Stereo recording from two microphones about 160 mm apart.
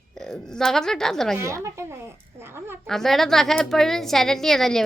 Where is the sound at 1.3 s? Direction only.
15° right (ahead or behind).